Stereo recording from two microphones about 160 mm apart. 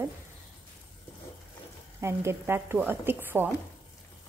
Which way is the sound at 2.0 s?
15° right (ahead or behind).